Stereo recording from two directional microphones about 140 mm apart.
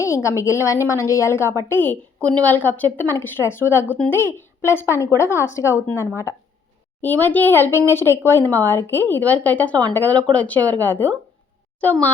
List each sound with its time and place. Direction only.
0.0 s a woman's voice: 20° left (ahead or behind)